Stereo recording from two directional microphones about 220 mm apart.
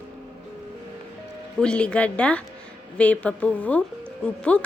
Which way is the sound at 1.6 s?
5° left (ahead or behind).